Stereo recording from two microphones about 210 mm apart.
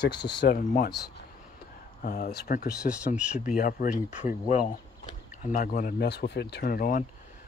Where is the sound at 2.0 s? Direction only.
40° left (ahead or behind).